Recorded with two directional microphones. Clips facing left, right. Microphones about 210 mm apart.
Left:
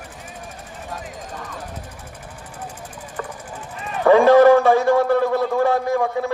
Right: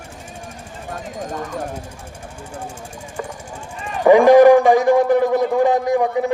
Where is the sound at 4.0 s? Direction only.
15° right (ahead or behind).